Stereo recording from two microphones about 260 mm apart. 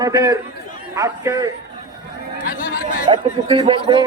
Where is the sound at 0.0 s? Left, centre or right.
Centre.